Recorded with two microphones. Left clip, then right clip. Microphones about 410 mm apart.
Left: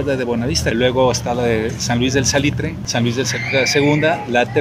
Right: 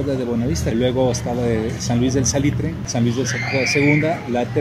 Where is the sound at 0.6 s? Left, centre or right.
Left.